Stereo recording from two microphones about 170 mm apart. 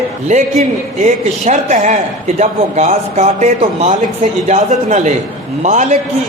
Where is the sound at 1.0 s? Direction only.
45° right (ahead or behind).